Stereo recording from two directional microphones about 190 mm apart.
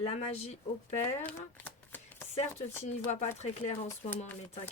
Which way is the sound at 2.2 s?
35° left (ahead or behind).